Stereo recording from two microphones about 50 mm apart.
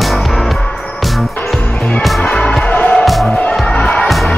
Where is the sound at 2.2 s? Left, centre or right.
Centre.